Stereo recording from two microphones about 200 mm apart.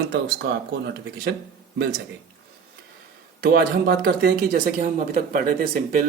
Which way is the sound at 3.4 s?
50° right (ahead or behind).